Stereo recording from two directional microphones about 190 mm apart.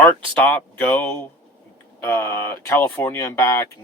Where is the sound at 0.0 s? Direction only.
5° left (ahead or behind).